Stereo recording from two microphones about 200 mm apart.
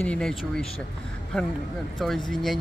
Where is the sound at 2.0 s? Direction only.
Centre (ahead or behind).